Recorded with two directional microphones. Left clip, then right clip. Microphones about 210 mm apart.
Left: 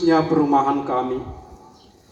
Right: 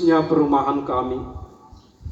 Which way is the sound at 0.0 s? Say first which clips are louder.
Even; 25° left (ahead or behind).